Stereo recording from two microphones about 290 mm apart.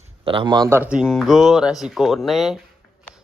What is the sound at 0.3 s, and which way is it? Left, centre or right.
A man's voice, centre.